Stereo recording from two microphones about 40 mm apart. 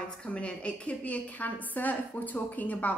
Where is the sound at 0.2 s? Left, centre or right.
Left.